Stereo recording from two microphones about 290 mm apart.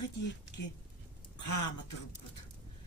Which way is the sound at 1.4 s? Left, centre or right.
Left.